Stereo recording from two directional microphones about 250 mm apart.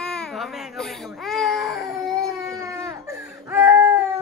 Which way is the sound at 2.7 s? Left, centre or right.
Centre.